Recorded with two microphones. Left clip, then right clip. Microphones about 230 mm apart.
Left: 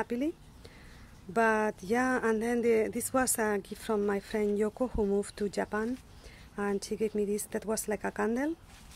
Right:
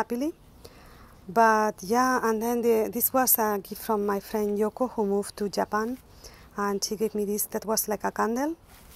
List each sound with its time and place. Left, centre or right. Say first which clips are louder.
0.0 s speech: right 4 dB; centre
1.3 s speech: right 7 dB; centre